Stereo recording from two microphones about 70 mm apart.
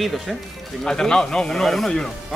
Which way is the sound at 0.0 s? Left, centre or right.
Centre.